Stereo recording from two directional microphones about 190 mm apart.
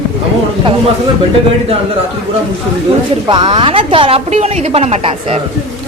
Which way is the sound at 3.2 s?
25° right (ahead or behind).